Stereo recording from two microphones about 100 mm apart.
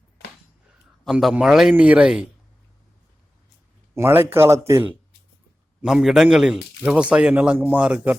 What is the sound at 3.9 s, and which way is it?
Speech, 25° right (ahead or behind).